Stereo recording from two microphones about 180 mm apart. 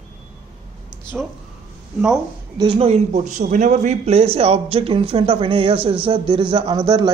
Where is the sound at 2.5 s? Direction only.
25° right (ahead or behind).